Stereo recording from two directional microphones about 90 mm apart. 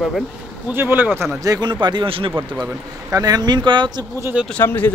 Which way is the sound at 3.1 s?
45° right (ahead or behind).